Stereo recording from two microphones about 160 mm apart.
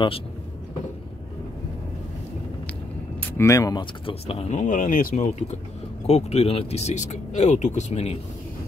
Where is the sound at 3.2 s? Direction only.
15° left (ahead or behind); by 5.3 s 60° left (ahead or behind).